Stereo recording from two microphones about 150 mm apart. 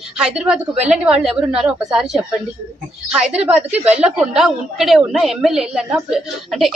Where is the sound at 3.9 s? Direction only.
5° right (ahead or behind).